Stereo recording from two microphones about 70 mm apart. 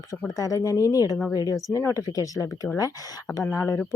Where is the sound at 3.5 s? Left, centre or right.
Left.